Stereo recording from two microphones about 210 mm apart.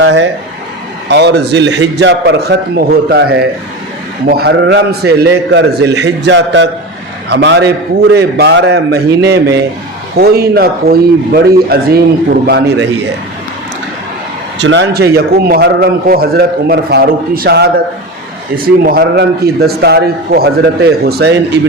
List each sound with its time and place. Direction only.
0.0 s a man's voice: 60° right (ahead or behind)
14.6 s a man's voice: 55° right (ahead or behind)